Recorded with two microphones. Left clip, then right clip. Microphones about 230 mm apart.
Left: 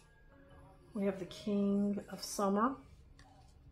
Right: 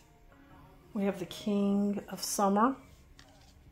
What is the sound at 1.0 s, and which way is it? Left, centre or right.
Speech, right.